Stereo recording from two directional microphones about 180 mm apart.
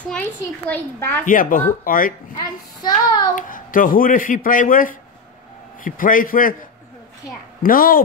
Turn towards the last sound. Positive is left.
turn(degrees=50)  # may be behind; listen again after turning